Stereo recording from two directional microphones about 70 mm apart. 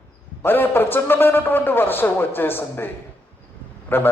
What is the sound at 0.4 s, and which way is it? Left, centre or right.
A man's voice, left.